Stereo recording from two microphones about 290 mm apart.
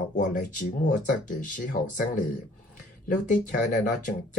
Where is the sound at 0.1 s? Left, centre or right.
Left.